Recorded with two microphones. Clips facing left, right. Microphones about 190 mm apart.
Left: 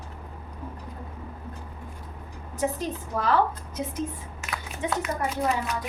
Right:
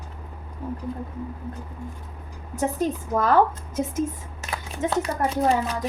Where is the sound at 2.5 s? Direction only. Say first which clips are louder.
Right 4 dB; 45° right (ahead or behind).